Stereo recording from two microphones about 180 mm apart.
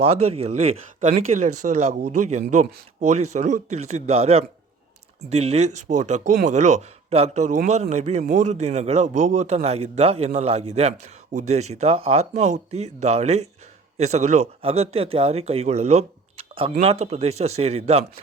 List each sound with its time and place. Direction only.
0.0 s a man's voice: 35° right (ahead or behind)